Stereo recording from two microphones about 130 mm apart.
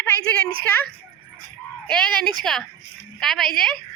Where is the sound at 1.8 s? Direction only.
5° left (ahead or behind).